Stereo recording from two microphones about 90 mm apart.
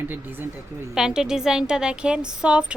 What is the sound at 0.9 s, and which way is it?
A woman's voice, 5° right (ahead or behind).